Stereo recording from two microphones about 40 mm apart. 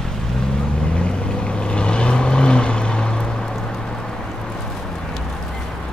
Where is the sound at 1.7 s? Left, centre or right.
Left.